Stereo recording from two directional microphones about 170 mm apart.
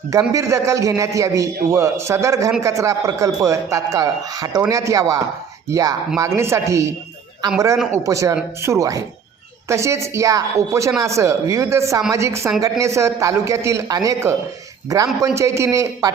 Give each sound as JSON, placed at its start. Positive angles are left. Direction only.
{"t": 0.1, "sound": "a man's voice", "side_deg": -20}
{"t": 7.9, "sound": "a man's voice", "side_deg": -20}